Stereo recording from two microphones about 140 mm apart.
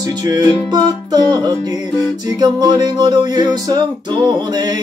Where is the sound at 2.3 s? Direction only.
30° right (ahead or behind).